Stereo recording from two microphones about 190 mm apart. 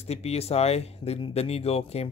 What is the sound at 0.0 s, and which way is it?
Speech, 35° left (ahead or behind).